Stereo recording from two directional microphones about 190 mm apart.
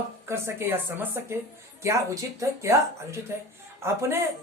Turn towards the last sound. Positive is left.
turn(degrees=-15)  # may be behind; listen again after turning